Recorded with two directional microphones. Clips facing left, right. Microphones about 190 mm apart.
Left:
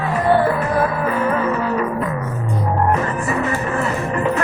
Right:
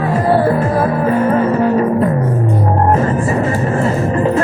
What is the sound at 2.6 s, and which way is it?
Music, 40° right (ahead or behind).